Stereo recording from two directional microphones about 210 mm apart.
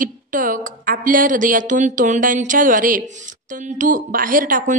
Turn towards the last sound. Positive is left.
turn(degrees=-40)  # may be behind; listen again after turning